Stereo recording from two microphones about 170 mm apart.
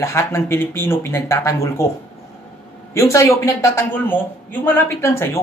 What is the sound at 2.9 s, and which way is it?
Speech, 15° left (ahead or behind).